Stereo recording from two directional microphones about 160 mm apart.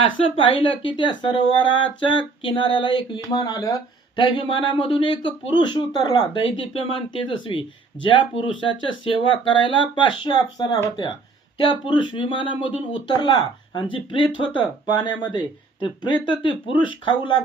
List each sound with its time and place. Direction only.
0.2 s speech: 35° left (ahead or behind)
11.9 s speech: 30° left (ahead or behind)
16.4 s speech: 30° left (ahead or behind)